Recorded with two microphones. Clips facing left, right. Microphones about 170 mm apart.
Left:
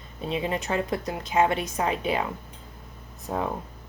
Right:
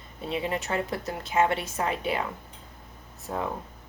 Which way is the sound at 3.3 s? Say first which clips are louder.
Left 3 dB; 25° left (ahead or behind).